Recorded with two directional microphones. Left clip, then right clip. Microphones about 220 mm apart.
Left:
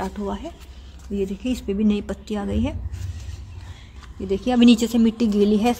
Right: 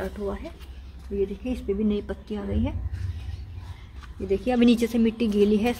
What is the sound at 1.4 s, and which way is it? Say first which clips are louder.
Speech: left 3 dB; 40° left (ahead or behind).